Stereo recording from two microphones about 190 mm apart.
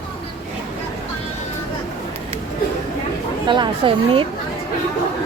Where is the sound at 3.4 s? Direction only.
25° right (ahead or behind).